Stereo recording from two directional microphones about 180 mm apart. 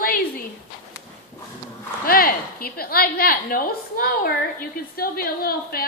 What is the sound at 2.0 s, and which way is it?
A woman's voice, 55° left (ahead or behind).